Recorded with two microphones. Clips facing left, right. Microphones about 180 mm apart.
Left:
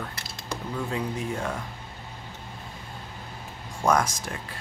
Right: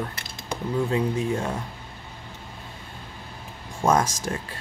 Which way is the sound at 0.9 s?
25° right (ahead or behind).